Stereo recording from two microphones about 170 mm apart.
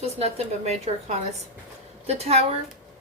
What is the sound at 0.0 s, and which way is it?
Speech, 40° right (ahead or behind).